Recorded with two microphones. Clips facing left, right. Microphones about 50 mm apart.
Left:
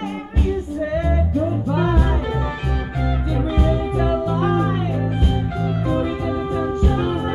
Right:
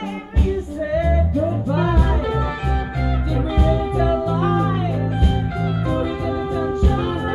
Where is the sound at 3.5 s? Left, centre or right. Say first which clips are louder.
Right 2 dB; centre.